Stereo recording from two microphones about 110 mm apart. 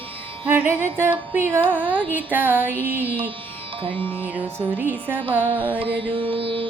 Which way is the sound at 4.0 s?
15° left (ahead or behind).